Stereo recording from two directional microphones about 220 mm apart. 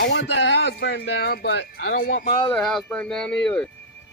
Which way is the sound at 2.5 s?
Centre (ahead or behind).